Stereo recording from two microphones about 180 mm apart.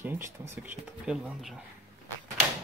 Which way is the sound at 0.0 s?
10° right (ahead or behind).